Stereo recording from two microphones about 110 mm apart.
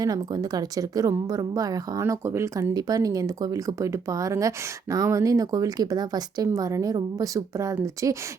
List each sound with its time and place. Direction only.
0.0 s a woman's voice: 35° right (ahead or behind)